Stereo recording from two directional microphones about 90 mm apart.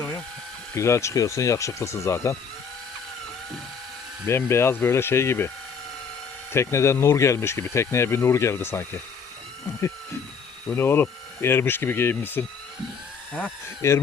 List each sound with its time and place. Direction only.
0.8 s speech: 35° left (ahead or behind)
4.3 s speech: 30° left (ahead or behind)
6.5 s speech: 30° left (ahead or behind)
10.7 s speech: 25° left (ahead or behind)
13.8 s speech: 30° left (ahead or behind)